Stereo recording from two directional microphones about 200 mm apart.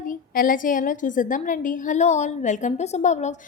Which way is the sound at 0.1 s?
45° left (ahead or behind).